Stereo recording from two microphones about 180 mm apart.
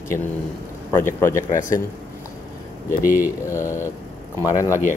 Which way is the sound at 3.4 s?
15° left (ahead or behind).